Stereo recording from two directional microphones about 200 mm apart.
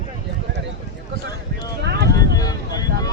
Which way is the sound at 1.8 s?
55° right (ahead or behind).